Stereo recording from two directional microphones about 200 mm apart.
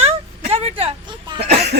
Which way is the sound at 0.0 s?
30° right (ahead or behind).